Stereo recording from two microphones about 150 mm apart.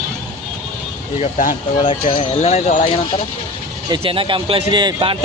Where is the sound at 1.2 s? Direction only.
60° left (ahead or behind).